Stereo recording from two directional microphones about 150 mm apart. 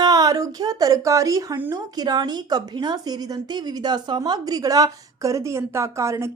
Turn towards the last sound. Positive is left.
turn(degrees=-20)  # may be behind; listen again after turning